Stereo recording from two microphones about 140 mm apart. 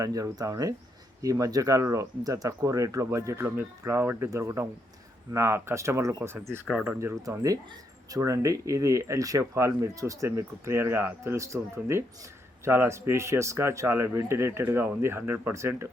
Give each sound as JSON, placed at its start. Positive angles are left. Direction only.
{"t": 0.0, "sound": "speech", "side_deg": -25}
{"t": 6.7, "sound": "speech", "side_deg": 0}
{"t": 7.0, "sound": "speech", "side_deg": -20}